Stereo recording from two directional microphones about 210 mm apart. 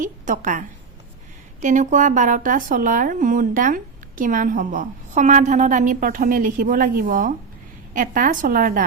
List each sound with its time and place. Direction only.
0.0 s speech: 40° right (ahead or behind)
1.6 s speech: 35° right (ahead or behind)